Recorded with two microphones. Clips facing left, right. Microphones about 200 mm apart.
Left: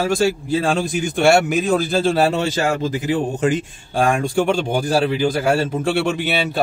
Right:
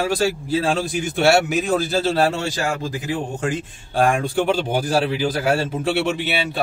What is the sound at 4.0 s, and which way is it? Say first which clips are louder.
A man's voice: left 1 dB; centre (ahead or behind).